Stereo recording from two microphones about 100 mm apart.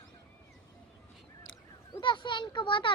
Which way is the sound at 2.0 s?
50° left (ahead or behind).